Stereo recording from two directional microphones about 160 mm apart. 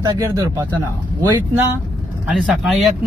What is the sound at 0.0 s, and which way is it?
Speech, 20° right (ahead or behind).